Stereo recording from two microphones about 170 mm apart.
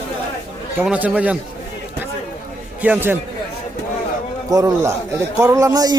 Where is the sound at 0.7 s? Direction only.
10° right (ahead or behind).